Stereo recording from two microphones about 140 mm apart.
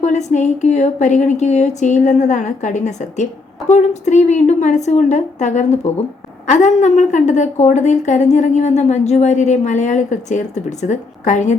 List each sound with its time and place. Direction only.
0.0 s a woman's voice: 55° left (ahead or behind)